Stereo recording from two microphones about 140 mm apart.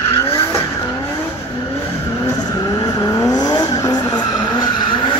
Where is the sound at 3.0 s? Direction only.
25° left (ahead or behind).